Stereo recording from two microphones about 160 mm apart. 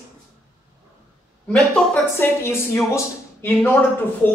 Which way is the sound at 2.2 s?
15° left (ahead or behind).